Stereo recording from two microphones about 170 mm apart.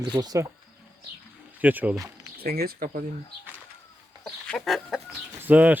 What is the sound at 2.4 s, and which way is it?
Speech, 65° right (ahead or behind).